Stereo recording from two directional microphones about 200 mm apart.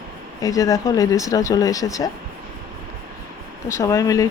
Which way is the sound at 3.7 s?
15° left (ahead or behind).